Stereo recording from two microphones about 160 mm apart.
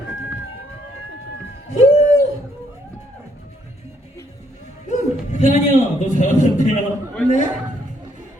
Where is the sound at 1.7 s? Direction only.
45° left (ahead or behind).